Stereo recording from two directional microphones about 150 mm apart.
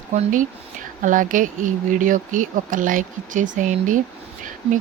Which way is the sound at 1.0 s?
60° right (ahead or behind).